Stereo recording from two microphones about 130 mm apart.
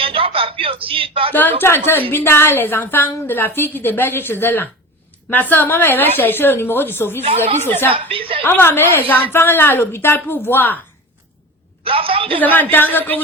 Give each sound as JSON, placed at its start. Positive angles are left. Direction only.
{"t": 0.0, "sound": "a sound", "side_deg": -45}
{"t": 1.3, "sound": "a woman's voice", "side_deg": 15}
{"t": 11.8, "sound": "a man's voice", "side_deg": -45}
{"t": 12.4, "sound": "a woman's voice", "side_deg": 15}